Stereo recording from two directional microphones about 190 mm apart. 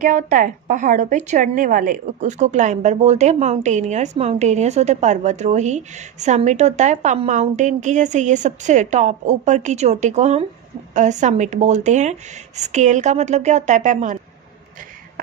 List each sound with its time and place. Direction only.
0.0 s a woman's voice: 40° right (ahead or behind)